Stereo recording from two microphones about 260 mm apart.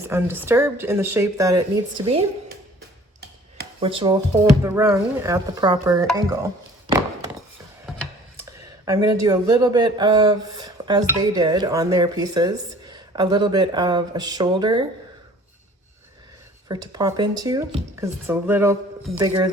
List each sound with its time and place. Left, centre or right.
0.0 s speech: centre
3.8 s speech: centre
8.8 s speech: centre
16.6 s speech: centre